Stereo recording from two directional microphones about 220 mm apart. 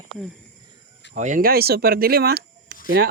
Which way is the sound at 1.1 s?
35° right (ahead or behind).